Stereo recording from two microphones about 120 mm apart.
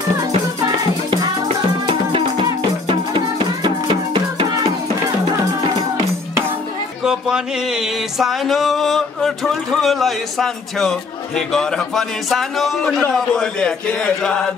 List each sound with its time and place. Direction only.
1.9 s music: 40° right (ahead or behind)
7.0 s music: 5° right (ahead or behind)
13.0 s speech: 5° left (ahead or behind)